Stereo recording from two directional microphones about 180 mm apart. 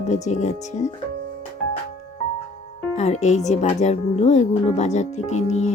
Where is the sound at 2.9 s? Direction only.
40° left (ahead or behind).